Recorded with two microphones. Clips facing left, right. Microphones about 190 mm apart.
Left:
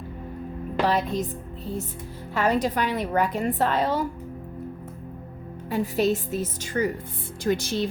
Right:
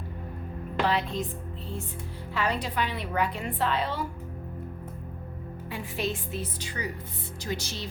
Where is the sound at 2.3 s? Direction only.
45° left (ahead or behind).